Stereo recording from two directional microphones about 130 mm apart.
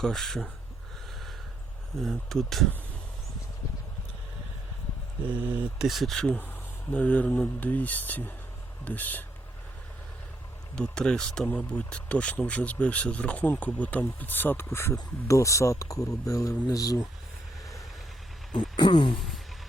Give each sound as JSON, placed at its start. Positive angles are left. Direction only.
{"t": 0.0, "sound": "speech", "side_deg": 5}
{"t": 2.0, "sound": "speech", "side_deg": 0}
{"t": 5.2, "sound": "speech", "side_deg": -10}
{"t": 10.8, "sound": "speech", "side_deg": 5}
{"t": 18.8, "sound": "a sound", "side_deg": 35}
{"t": 19.1, "sound": "speech", "side_deg": 0}